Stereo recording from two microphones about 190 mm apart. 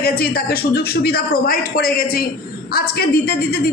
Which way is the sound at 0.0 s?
55° left (ahead or behind).